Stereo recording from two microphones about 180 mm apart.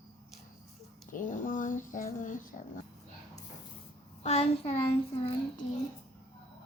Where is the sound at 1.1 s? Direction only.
45° left (ahead or behind).